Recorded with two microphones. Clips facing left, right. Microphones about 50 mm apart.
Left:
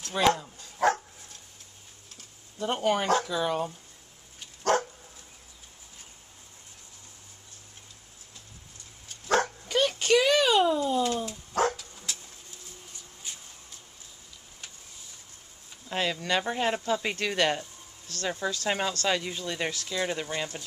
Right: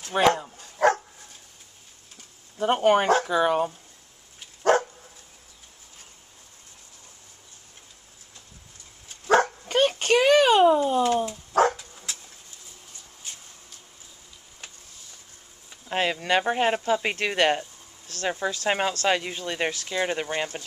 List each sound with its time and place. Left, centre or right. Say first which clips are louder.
0.1 s bow-wow: right 4 dB; right
2.6 s speech: right 7 dB; right
9.7 s a sound: right 1 dB; right
11.2 s dog: right 6 dB; centre
15.9 s speech: right 4 dB; right